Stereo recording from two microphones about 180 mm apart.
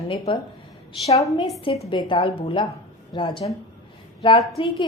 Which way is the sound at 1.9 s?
30° left (ahead or behind).